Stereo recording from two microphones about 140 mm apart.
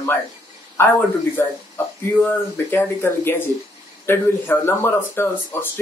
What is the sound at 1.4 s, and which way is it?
Speech, 15° left (ahead or behind).